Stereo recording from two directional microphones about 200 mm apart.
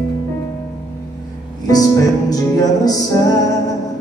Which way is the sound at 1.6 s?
20° left (ahead or behind).